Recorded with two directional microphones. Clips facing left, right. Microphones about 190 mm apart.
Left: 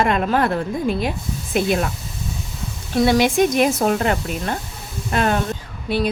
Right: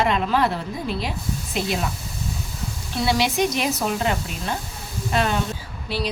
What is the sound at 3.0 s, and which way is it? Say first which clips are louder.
Speech: left 6 dB; 50° left (ahead or behind).